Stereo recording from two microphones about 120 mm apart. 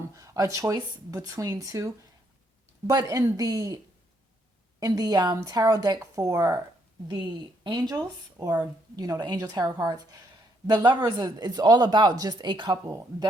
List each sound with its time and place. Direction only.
0.0 s speech: 30° right (ahead or behind)
4.8 s speech: 35° right (ahead or behind)
7.6 s speech: 35° right (ahead or behind)
12.8 s speech: 25° right (ahead or behind)